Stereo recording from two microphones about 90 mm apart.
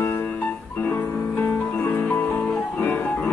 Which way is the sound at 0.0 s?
25° left (ahead or behind).